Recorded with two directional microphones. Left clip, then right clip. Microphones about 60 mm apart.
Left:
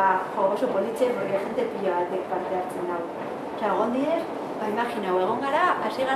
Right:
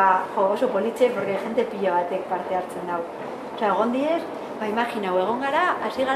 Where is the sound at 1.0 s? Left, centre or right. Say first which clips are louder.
Right 4 dB; right.